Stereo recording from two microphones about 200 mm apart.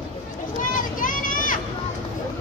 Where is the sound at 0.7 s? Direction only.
40° left (ahead or behind).